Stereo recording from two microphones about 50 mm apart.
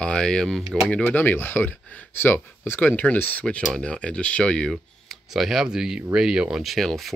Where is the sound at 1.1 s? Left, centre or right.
Left.